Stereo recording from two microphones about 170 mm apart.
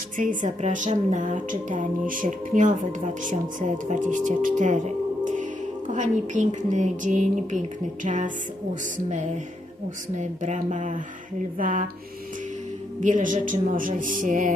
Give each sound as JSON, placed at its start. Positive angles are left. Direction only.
{"t": 0.2, "sound": "speech", "side_deg": -45}
{"t": 5.9, "sound": "speech", "side_deg": -45}
{"t": 10.2, "sound": "speech", "side_deg": -45}
{"t": 13.0, "sound": "speech", "side_deg": -50}